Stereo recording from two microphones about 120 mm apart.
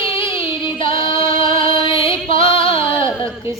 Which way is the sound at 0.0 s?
45° left (ahead or behind).